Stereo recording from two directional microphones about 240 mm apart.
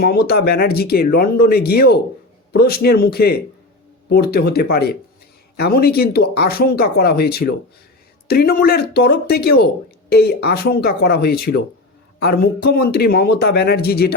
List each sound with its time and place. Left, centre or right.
0.0 s speech: left